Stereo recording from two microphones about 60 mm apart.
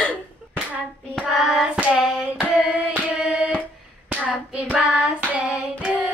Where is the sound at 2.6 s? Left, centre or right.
Right.